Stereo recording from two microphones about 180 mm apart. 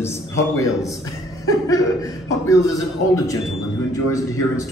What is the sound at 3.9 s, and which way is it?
Speech, 20° left (ahead or behind).